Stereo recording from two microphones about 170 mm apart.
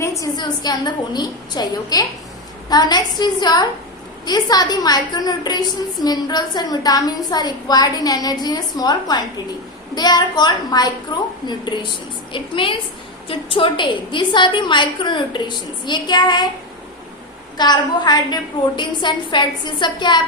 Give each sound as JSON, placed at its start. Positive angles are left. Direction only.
{"t": 0.0, "sound": "a woman's voice", "side_deg": 20}
{"t": 17.6, "sound": "a woman's voice", "side_deg": 25}